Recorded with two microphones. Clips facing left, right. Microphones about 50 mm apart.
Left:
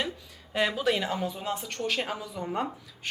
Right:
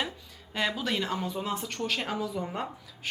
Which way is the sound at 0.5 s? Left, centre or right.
Centre.